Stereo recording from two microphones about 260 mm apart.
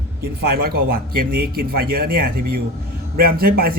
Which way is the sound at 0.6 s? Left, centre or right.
Right.